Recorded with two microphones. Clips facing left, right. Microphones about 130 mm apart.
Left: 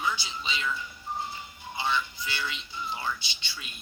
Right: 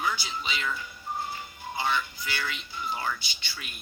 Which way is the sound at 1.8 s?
25° left (ahead or behind).